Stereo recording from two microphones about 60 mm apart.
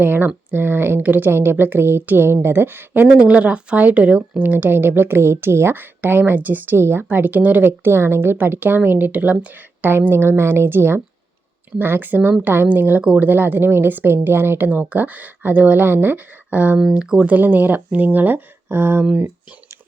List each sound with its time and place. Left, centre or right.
0.0 s speech: right
3.2 s speech: centre
6.7 s speech: right
7.9 s speech: right
14.7 s speech: right
16.8 s speech: centre
17.2 s speech: right